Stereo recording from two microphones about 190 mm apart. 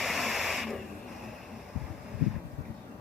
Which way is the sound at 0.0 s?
Centre (ahead or behind).